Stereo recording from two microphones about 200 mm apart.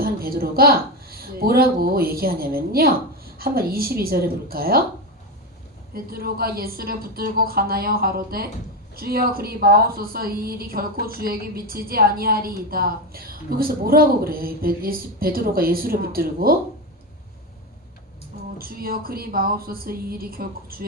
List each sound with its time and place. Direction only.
0.0 s a woman's voice: 50° right (ahead or behind)
5.9 s a woman's voice: 50° right (ahead or behind)
18.5 s a woman's voice: 45° right (ahead or behind)